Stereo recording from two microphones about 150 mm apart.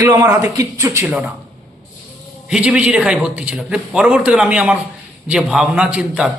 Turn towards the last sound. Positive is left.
turn(degrees=-5)  # may be behind; listen again after turning